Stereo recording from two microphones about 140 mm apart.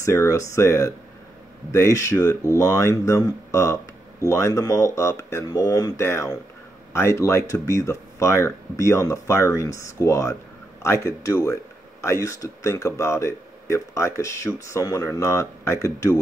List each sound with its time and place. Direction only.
0.0 s speech: 20° left (ahead or behind)